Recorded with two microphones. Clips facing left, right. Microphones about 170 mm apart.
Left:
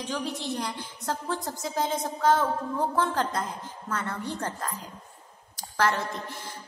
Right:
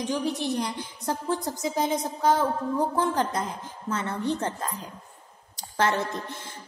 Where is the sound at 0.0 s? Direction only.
15° right (ahead or behind).